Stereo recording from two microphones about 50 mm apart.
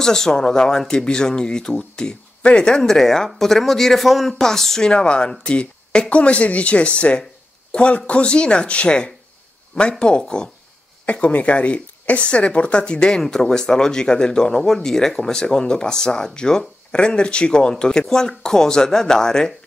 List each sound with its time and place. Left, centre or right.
0.0 s speech: centre
2.8 s speech: centre
11.1 s speech: left; by 19.5 s centre